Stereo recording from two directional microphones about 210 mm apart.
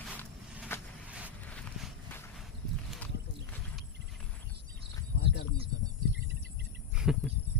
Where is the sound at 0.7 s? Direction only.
10° left (ahead or behind).